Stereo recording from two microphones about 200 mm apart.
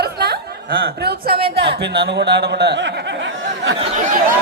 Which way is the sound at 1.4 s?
25° right (ahead or behind).